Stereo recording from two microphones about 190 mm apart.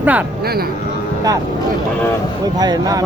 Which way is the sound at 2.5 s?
20° right (ahead or behind).